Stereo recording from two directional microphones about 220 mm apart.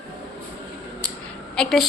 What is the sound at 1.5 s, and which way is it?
Speech, centre (ahead or behind).